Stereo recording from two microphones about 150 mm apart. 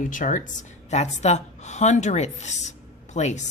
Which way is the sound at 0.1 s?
60° left (ahead or behind).